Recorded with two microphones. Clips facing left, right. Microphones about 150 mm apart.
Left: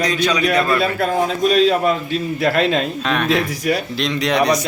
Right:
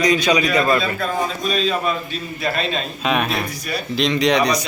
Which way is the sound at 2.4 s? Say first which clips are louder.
Left 6 dB; 90° left.